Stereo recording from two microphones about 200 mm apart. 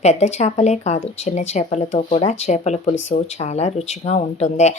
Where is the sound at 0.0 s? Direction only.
35° left (ahead or behind).